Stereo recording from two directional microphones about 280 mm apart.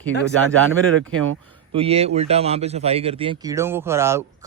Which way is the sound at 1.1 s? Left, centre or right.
Right.